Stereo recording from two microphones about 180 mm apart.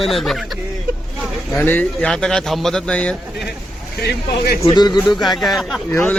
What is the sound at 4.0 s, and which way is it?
Speech, 60° left (ahead or behind).